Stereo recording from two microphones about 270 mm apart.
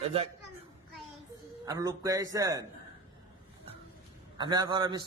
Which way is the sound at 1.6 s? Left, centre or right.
Centre.